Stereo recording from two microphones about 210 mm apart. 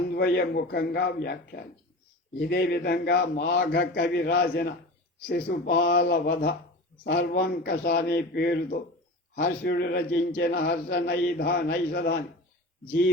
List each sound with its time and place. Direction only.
0.1 s a man's voice: 45° left (ahead or behind)